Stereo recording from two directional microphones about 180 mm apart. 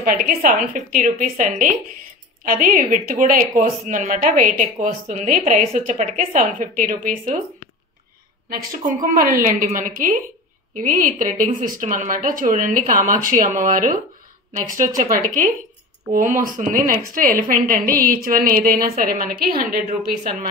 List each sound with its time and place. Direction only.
0.0 s a woman's voice: 50° right (ahead or behind)
8.5 s a woman's voice: 50° right (ahead or behind)
16.1 s a woman's voice: 45° right (ahead or behind)